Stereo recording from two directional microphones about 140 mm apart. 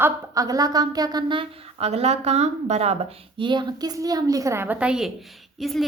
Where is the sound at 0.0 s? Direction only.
25° right (ahead or behind); by 2.9 s 50° right (ahead or behind).